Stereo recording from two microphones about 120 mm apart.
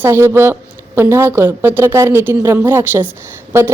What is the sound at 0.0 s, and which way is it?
A woman's voice, 20° right (ahead or behind).